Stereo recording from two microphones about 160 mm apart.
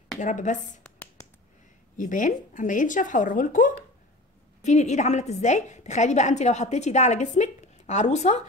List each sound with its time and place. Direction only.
0.2 s a woman's voice: 50° left (ahead or behind)
2.0 s a woman's voice: 55° left (ahead or behind)